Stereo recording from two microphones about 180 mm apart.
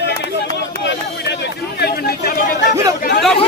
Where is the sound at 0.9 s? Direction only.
70° left (ahead or behind).